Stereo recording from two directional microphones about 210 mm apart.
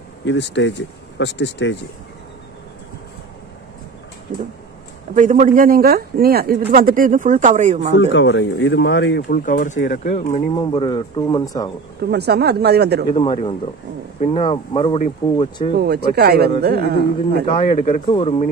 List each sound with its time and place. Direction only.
0.2 s speech: 55° left (ahead or behind)
5.1 s speech: 35° right (ahead or behind)
7.9 s speech: 55° left (ahead or behind); by 10.4 s 35° left (ahead or behind)
10.5 s speech: 20° left (ahead or behind)
12.1 s speech: 50° right (ahead or behind)
13.1 s speech: 25° left (ahead or behind)
15.8 s speech: 50° right (ahead or behind)
17.5 s speech: 25° left (ahead or behind)
17.7 s speech: 35° left (ahead or behind)